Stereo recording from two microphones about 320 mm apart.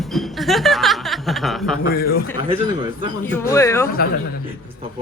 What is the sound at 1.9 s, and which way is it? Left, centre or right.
Speech, left.